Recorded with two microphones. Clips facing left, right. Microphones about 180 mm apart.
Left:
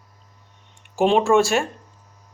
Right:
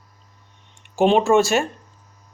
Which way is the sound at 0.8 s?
Centre (ahead or behind).